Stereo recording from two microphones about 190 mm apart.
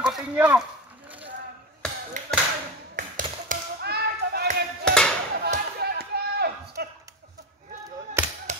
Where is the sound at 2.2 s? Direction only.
40° right (ahead or behind).